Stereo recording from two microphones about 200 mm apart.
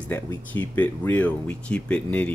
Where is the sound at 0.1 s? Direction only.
10° left (ahead or behind).